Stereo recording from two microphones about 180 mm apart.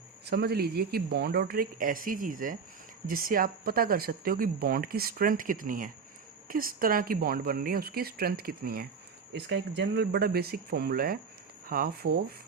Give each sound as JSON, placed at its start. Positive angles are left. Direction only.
{"t": 0.3, "sound": "speech", "side_deg": -60}
{"t": 9.3, "sound": "speech", "side_deg": -70}